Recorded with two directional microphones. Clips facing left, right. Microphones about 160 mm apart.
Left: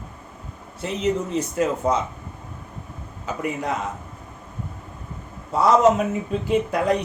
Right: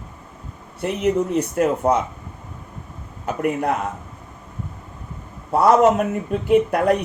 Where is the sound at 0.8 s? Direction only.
60° right (ahead or behind).